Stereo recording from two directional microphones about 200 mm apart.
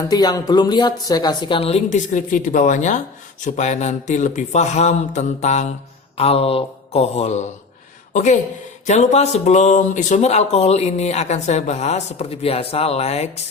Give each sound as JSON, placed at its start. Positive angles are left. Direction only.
{"t": 0.1, "sound": "a woman's voice", "side_deg": 20}